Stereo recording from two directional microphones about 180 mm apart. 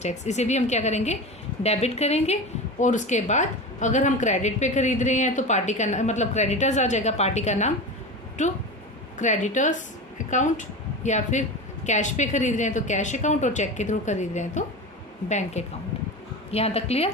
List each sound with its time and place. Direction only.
0.0 s a woman's voice: 40° left (ahead or behind)
9.1 s a woman's voice: 40° left (ahead or behind)